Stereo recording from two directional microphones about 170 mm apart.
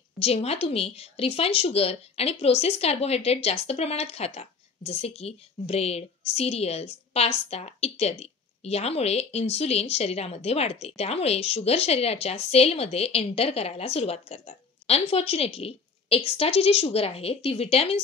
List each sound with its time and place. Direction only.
0.2 s a woman's voice: 35° left (ahead or behind)